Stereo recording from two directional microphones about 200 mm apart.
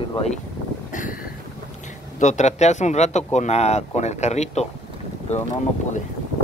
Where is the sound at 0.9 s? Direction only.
40° left (ahead or behind).